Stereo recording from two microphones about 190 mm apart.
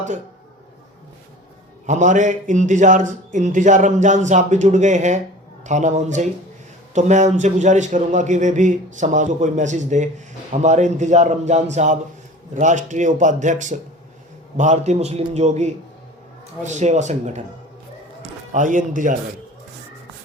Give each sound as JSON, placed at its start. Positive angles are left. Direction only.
{"t": 1.9, "sound": "a man's voice", "side_deg": -40}
{"t": 18.5, "sound": "speech", "side_deg": -40}